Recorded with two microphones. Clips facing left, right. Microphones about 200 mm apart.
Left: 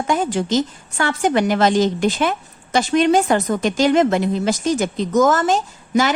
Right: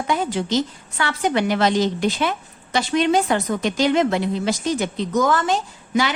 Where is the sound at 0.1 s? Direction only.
45° left (ahead or behind).